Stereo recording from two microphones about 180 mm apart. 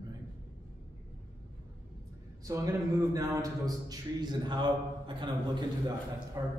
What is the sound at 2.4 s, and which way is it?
Speech, 20° right (ahead or behind).